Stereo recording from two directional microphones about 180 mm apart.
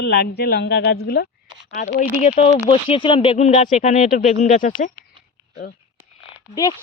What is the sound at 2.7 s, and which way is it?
Speech, 30° left (ahead or behind).